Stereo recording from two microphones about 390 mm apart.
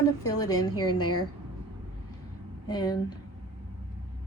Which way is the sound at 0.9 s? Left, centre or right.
Left.